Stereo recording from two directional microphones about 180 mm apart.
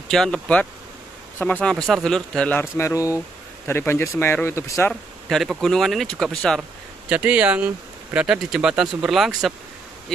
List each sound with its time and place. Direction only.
0.1 s speech: 5° left (ahead or behind)
5.3 s speech: centre (ahead or behind)
7.1 s speech: 5° right (ahead or behind)